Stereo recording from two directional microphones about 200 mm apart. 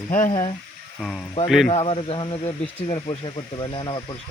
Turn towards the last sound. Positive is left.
turn(degrees=25)  # may be behind; listen again after turning